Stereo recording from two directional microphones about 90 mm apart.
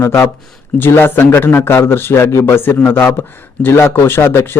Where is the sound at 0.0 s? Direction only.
30° left (ahead or behind).